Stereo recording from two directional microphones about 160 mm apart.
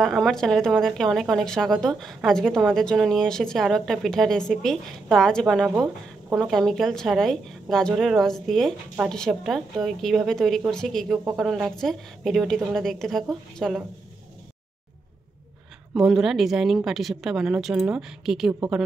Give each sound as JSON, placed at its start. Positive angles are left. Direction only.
{"t": 0.0, "sound": "a woman's voice", "side_deg": 0}
{"t": 15.9, "sound": "a woman's voice", "side_deg": -5}